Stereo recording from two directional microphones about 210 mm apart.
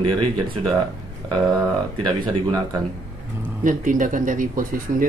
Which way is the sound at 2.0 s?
20° right (ahead or behind).